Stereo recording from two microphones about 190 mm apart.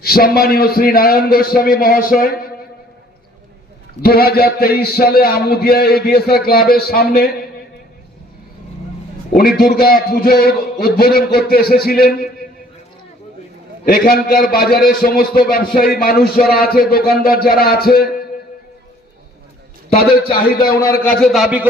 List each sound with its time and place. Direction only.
0.0 s a man's voice: 55° left (ahead or behind)
4.0 s a man's voice: 55° left (ahead or behind)
9.3 s a man's voice: 50° left (ahead or behind)
13.8 s a man's voice: 50° left (ahead or behind)
20.2 s a man's voice: 30° left (ahead or behind)
20.7 s a man's voice: 50° left (ahead or behind)
21.0 s a man's voice: 5° left (ahead or behind)